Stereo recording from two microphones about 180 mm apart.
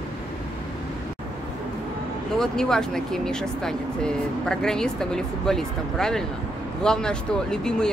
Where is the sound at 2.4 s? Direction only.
5° left (ahead or behind).